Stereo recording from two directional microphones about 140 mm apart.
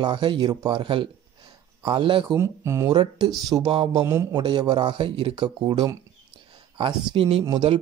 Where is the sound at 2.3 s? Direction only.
20° right (ahead or behind).